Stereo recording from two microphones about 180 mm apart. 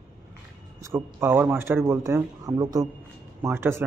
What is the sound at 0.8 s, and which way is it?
Speech, 15° right (ahead or behind).